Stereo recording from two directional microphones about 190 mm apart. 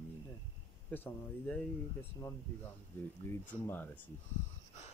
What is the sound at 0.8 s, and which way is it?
Speech, 10° left (ahead or behind).